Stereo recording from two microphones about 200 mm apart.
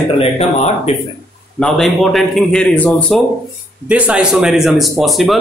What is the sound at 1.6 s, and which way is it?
Speech, centre (ahead or behind).